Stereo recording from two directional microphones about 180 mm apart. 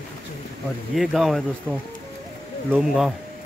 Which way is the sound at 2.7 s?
Centre (ahead or behind).